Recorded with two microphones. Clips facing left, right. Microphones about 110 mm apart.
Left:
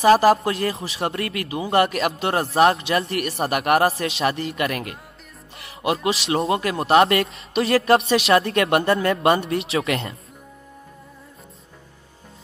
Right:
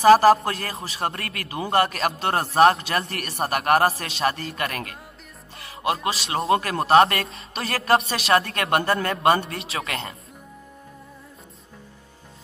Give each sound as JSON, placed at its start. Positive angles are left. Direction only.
{"t": 0.2, "sound": "a man's voice", "side_deg": -40}
{"t": 6.0, "sound": "a man's voice", "side_deg": -35}